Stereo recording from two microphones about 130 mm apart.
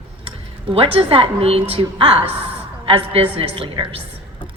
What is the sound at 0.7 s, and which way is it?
A woman's voice, 45° right (ahead or behind).